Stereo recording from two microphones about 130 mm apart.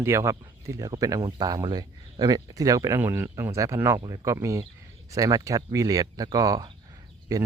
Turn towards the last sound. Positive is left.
turn(degrees=-30)  # may be behind; listen again after turning